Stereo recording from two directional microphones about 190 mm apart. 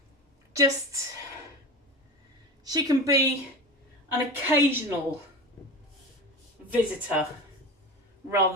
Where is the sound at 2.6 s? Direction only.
20° right (ahead or behind).